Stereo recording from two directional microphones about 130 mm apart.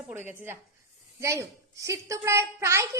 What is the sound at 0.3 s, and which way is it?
A woman's voice, 15° right (ahead or behind).